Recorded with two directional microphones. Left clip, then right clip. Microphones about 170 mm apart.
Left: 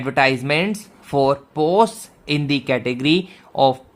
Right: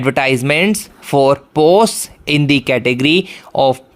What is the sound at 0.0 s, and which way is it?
Speech, 40° right (ahead or behind).